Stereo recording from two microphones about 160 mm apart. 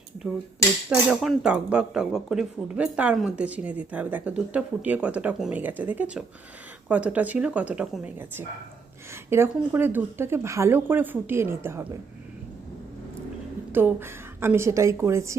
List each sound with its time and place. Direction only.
0.9 s speech: 5° right (ahead or behind)
13.7 s speech: 15° right (ahead or behind)